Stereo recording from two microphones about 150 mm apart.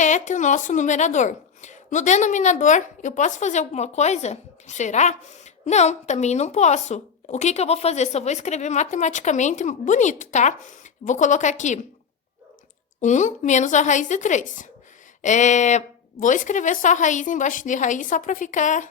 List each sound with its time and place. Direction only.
0.0 s speech: 55° left (ahead or behind)
13.0 s a woman's voice: 55° left (ahead or behind)